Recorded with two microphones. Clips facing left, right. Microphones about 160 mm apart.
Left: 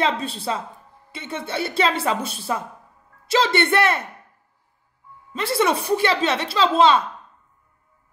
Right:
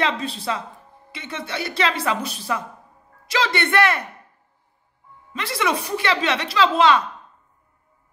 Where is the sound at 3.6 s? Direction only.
25° left (ahead or behind).